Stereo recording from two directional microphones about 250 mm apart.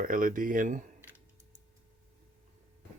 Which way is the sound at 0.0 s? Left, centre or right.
Right.